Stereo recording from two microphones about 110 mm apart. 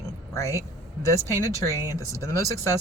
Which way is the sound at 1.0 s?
25° left (ahead or behind).